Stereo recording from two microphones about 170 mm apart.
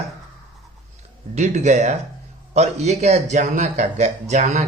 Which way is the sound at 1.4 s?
45° right (ahead or behind).